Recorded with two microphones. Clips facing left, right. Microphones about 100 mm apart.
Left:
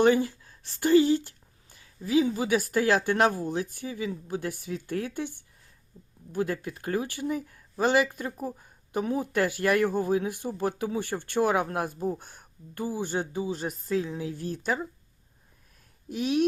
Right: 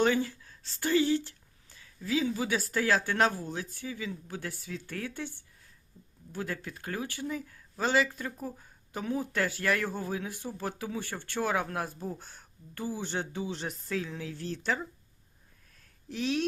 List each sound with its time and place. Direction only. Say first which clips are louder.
0.0 s speech: left 5 dB; 15° left (ahead or behind)
1.7 s a sound: left 7 dB; 15° left (ahead or behind)
2.4 s speech: left 5 dB; 15° left (ahead or behind)
10.7 s speech: left 5 dB; 50° left (ahead or behind)
10.9 s speech: left 7 dB; 15° left (ahead or behind)
16.0 s speech: left 4 dB; 15° left (ahead or behind)